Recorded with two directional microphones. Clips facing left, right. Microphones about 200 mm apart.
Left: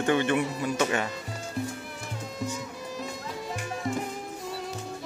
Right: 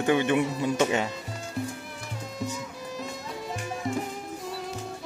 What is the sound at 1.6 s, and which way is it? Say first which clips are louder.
Music: even; centre (ahead or behind).